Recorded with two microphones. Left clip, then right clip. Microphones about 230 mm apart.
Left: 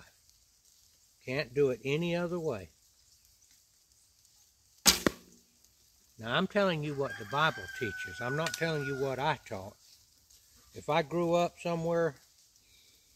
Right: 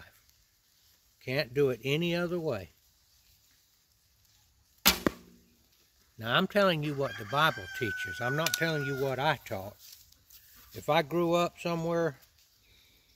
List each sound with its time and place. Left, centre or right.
1.2 s speech: right
6.1 s speech: right